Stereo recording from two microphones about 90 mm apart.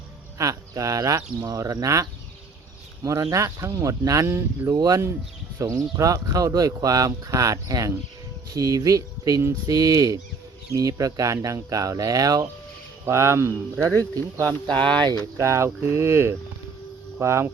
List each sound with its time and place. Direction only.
0.3 s speech: 40° right (ahead or behind)
4.7 s speech: 45° right (ahead or behind)
13.1 s speech: 30° right (ahead or behind)
14.8 s speech: 10° left (ahead or behind)
15.4 s speech: 30° right (ahead or behind)